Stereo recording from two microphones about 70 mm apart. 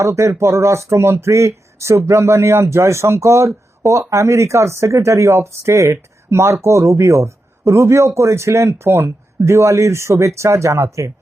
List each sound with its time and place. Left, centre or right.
0.0 s speech: right